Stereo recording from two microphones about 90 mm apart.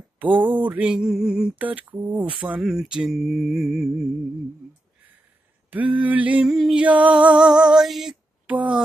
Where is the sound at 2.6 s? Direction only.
5° right (ahead or behind).